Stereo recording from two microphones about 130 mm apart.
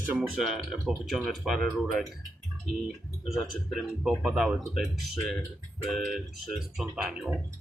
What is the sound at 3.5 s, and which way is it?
Speech, centre (ahead or behind).